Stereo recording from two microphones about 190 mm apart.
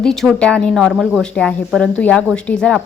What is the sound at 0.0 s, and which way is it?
Speech, 5° left (ahead or behind).